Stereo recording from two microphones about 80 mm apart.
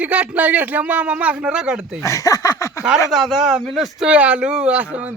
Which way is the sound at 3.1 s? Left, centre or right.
Centre.